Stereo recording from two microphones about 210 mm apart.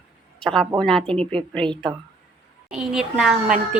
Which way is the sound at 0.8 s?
Centre (ahead or behind).